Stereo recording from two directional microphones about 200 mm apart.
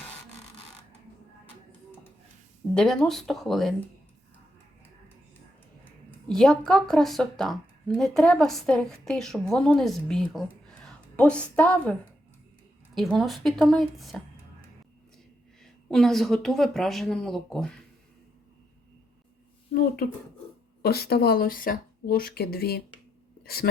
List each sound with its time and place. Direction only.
2.7 s a woman's voice: 5° left (ahead or behind)
6.2 s a woman's voice: 5° left (ahead or behind)
15.6 s a woman's voice: centre (ahead or behind)
20.8 s speech: 50° left (ahead or behind)